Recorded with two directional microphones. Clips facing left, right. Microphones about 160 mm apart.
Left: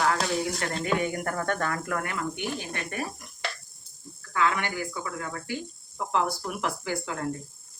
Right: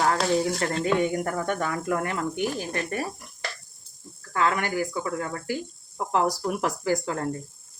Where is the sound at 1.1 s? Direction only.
15° right (ahead or behind).